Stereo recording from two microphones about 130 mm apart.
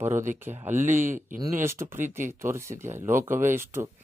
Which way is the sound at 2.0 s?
75° right (ahead or behind).